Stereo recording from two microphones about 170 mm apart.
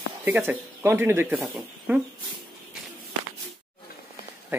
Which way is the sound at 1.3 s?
Centre (ahead or behind).